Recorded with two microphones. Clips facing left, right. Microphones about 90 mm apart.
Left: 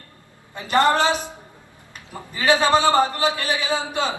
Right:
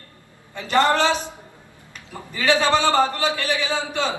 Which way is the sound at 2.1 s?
20° left (ahead or behind).